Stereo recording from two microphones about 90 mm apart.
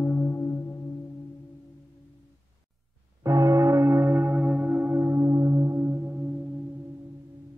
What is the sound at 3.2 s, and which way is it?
Church bell, 35° right (ahead or behind).